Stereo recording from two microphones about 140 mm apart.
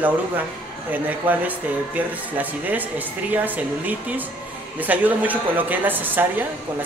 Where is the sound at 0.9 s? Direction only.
10° right (ahead or behind).